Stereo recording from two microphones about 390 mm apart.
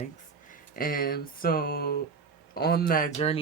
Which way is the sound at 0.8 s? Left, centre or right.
Left.